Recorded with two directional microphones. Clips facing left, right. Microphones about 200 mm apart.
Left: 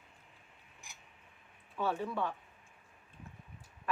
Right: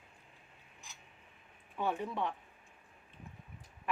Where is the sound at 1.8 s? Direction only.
20° right (ahead or behind).